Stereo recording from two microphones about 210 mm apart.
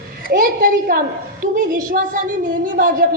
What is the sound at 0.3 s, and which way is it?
A woman's voice, 45° right (ahead or behind).